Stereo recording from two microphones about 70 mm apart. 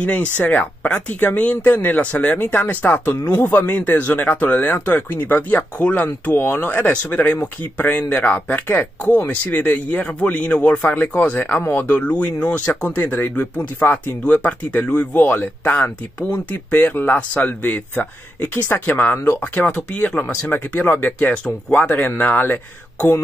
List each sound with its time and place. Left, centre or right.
0.0 s speech: centre
21.8 s speech: left